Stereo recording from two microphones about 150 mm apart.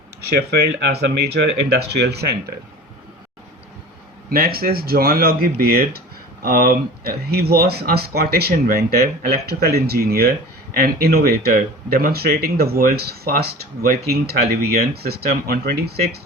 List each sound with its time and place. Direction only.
0.3 s speech: 90° right
4.3 s speech: 85° right
6.4 s speech: 80° right